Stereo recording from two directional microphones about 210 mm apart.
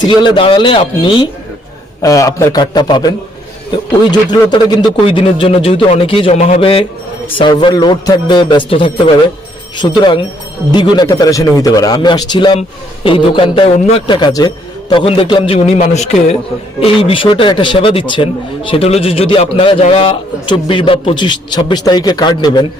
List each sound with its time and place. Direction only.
0.0 s a man's voice: 20° left (ahead or behind)